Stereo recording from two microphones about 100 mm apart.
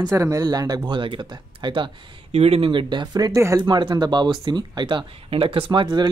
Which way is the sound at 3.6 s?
50° right (ahead or behind).